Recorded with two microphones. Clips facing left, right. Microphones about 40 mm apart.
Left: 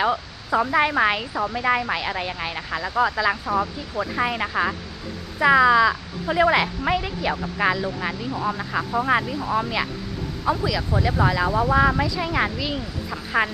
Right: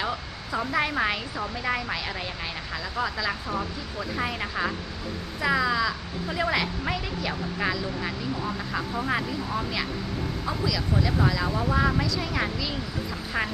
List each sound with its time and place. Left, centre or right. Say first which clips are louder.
0.0 s speech: left 7 dB; left